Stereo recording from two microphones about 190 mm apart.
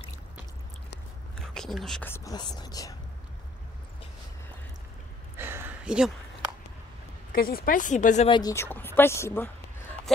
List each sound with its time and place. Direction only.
1.4 s speech: centre (ahead or behind); by 3.0 s 20° left (ahead or behind)
5.4 s a sound: 10° right (ahead or behind)
7.3 s speech: 50° left (ahead or behind)
8.3 s speech: 20° left (ahead or behind)